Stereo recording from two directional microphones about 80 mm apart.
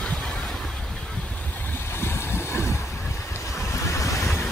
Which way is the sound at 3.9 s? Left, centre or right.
Left.